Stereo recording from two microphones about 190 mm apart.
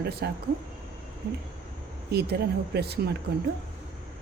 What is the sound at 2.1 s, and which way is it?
Speech, 60° right (ahead or behind).